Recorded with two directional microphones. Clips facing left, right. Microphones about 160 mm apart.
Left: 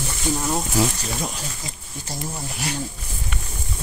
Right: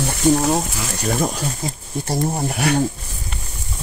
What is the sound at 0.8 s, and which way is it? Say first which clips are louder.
Speech: left 7 dB; 30° left (ahead or behind).